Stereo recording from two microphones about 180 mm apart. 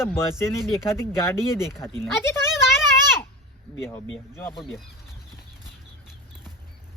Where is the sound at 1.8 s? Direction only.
15° left (ahead or behind).